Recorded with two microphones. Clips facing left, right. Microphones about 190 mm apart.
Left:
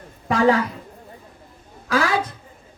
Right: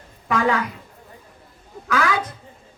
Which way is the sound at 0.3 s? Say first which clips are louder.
Left 4 dB; 35° left (ahead or behind).